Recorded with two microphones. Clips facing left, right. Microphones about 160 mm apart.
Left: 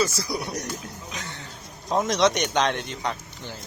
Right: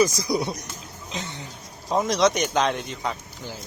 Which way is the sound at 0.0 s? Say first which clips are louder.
Right 5 dB; 15° right (ahead or behind).